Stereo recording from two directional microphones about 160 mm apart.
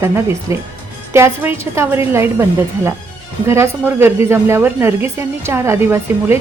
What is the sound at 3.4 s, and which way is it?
A woman's voice, 15° right (ahead or behind).